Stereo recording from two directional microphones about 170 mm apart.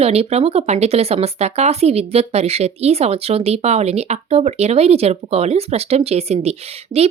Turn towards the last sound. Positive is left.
turn(degrees=-35)  # may be behind; listen again after turning